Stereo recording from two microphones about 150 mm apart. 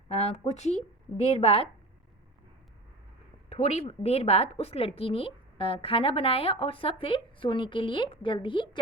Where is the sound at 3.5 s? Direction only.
45° left (ahead or behind).